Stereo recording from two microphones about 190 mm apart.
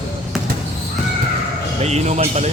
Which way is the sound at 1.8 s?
35° right (ahead or behind).